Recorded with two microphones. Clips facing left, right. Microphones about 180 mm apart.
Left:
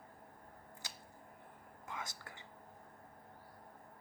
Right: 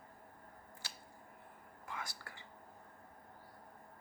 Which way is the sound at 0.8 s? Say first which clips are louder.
Even; 20° left (ahead or behind).